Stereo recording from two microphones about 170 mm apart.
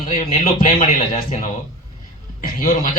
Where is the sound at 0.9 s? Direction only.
50° left (ahead or behind).